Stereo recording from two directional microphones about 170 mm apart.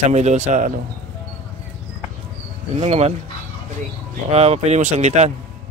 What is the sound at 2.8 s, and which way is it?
Speech, 40° right (ahead or behind).